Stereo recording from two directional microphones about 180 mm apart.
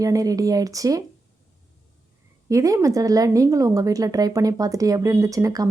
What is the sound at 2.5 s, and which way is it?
Speech, 20° right (ahead or behind).